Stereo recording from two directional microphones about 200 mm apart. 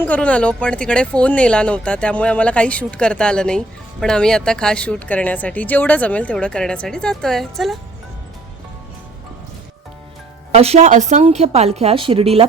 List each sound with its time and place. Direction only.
0.0 s a woman's voice: 5° left (ahead or behind)
10.5 s a woman's voice: 30° right (ahead or behind)